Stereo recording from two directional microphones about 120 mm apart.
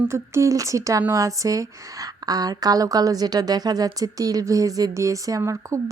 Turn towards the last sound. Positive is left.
turn(degrees=-25)  # may be behind; listen again after turning